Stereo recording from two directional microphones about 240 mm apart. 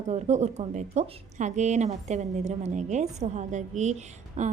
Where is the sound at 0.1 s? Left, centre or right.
Right.